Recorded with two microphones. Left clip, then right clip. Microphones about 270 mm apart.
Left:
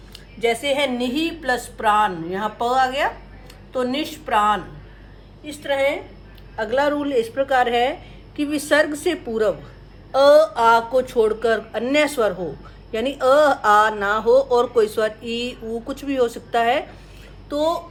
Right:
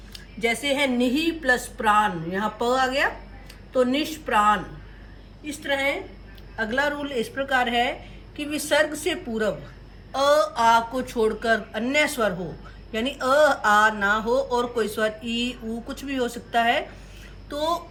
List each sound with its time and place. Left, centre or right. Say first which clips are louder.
0.1 s speech: left 4 dB; left
6.6 s speech: left 5 dB; left